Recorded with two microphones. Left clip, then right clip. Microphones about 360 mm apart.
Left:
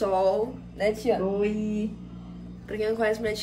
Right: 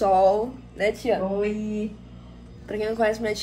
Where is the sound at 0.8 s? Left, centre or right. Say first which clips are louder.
Right 2 dB; right.